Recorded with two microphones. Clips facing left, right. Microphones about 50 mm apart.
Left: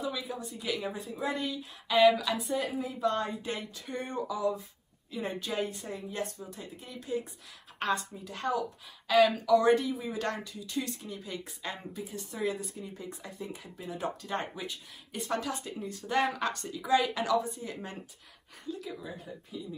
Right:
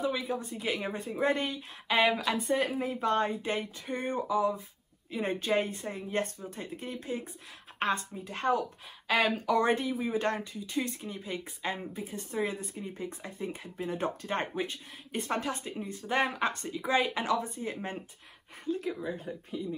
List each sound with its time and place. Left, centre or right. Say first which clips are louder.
0.0 s speech: right 4 dB; right
1.2 s speech: right 4 dB; right
5.1 s speech: right 5 dB; right